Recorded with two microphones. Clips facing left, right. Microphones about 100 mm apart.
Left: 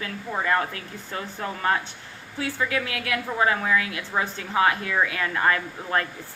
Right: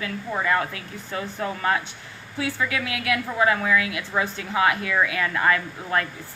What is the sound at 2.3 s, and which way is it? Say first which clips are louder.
A woman's voice: even; 35° left (ahead or behind).